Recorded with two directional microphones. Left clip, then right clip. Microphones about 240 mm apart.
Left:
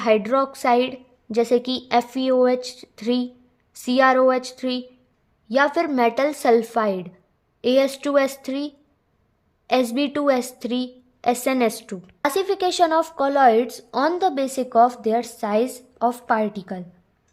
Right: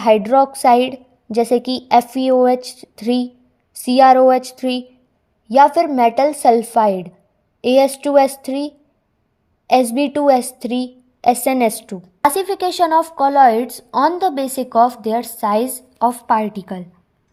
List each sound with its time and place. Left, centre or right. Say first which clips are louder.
0.0 s a woman's voice: right 7 dB; centre